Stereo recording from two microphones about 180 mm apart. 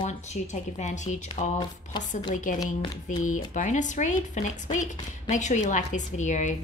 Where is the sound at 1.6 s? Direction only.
25° left (ahead or behind).